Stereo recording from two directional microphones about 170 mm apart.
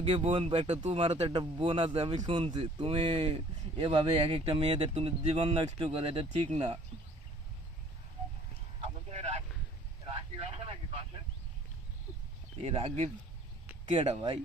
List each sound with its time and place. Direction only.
0.0 s speech: 30° right (ahead or behind)
8.8 s a sound: 40° right (ahead or behind)
12.5 s speech: 35° right (ahead or behind)